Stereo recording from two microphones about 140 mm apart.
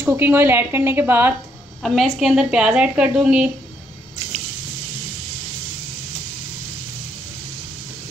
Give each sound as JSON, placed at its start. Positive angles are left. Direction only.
{"t": 0.0, "sound": "speech", "side_deg": -15}
{"t": 1.8, "sound": "a woman's voice", "side_deg": 0}